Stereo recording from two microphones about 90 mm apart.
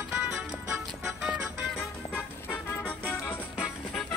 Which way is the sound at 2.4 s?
20° left (ahead or behind).